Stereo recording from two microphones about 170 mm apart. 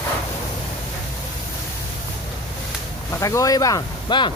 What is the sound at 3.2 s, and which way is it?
Speech, 20° left (ahead or behind).